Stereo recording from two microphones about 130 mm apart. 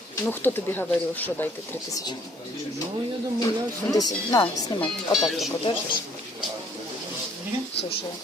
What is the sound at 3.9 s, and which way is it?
Speech, 30° left (ahead or behind).